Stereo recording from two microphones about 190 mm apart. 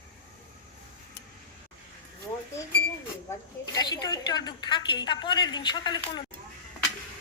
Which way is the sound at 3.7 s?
20° left (ahead or behind).